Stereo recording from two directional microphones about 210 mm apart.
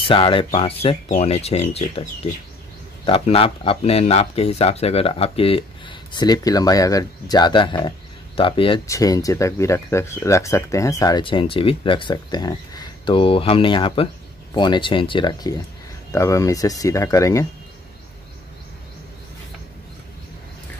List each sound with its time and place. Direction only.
0.0 s speech: 25° left (ahead or behind)
3.1 s speech: 25° left (ahead or behind)